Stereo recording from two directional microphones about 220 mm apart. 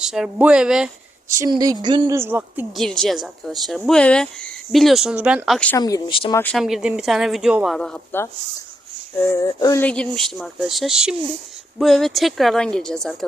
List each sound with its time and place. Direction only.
0.0 s speech: centre (ahead or behind)
1.4 s a woman's voice: 15° right (ahead or behind)
2.7 s speech: centre (ahead or behind)
5.8 s speech: 20° left (ahead or behind)
6.4 s speech: centre (ahead or behind)
9.3 s speech: 15° left (ahead or behind)